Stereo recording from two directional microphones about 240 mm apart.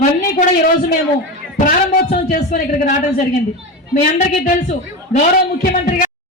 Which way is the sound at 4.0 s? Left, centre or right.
Left.